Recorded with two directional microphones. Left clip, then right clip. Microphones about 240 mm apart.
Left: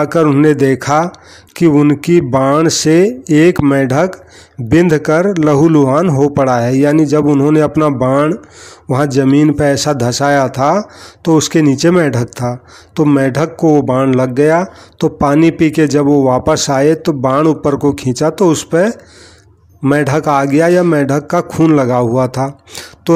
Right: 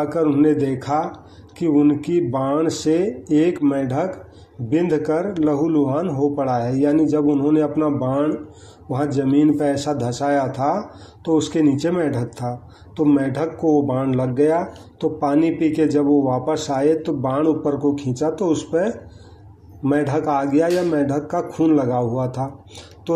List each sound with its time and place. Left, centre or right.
0.0 s speech: left
16.3 s a man's voice: left
16.5 s speech: left